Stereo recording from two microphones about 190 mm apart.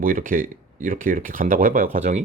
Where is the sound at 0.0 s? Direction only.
45° right (ahead or behind).